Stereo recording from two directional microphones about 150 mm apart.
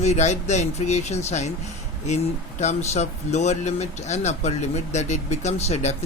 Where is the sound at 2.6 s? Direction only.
50° left (ahead or behind).